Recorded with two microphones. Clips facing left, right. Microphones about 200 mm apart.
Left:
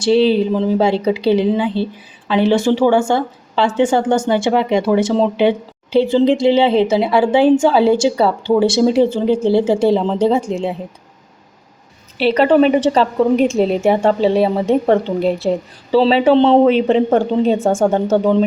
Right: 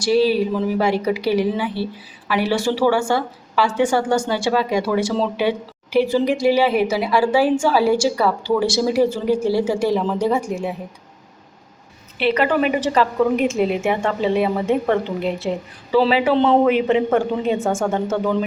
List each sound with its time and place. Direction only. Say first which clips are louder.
0.0 s speech: left 4 dB; 25° left (ahead or behind)
12.2 s a woman's voice: left 6 dB; 30° left (ahead or behind)